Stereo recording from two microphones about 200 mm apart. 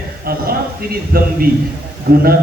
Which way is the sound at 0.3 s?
50° right (ahead or behind).